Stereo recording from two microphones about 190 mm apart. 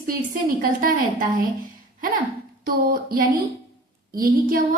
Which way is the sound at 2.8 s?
50° right (ahead or behind).